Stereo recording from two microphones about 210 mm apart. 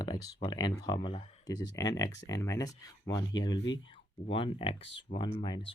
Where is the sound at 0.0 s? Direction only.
20° left (ahead or behind).